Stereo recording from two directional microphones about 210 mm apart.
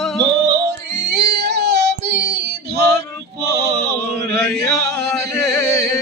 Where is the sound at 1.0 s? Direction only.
50° right (ahead or behind).